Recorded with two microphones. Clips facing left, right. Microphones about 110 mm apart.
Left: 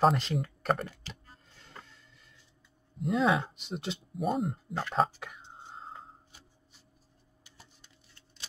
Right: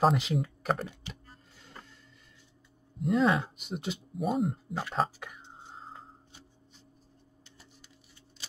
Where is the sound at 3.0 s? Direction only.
Centre (ahead or behind).